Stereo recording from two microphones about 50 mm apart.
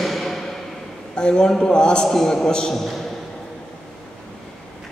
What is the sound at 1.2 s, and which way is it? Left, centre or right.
A man's voice, centre.